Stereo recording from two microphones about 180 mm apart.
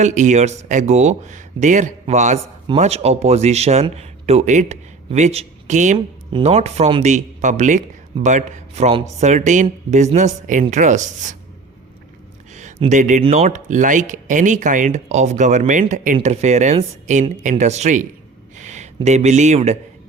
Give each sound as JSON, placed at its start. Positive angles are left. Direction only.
{"t": 0.0, "sound": "a man's voice", "side_deg": -40}
{"t": 12.9, "sound": "speech", "side_deg": -45}
{"t": 18.5, "sound": "a sound", "side_deg": -40}
{"t": 19.0, "sound": "speech", "side_deg": -40}